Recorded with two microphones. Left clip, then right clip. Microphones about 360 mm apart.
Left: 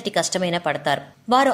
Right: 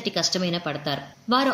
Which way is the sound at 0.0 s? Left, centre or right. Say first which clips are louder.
Left 3 dB; centre.